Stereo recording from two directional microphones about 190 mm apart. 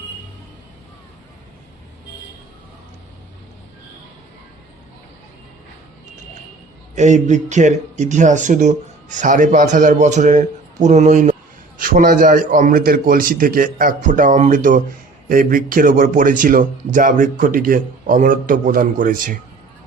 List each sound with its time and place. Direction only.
6.9 s speech: 40° right (ahead or behind)